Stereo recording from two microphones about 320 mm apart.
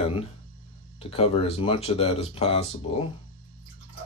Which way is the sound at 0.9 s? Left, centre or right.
Centre.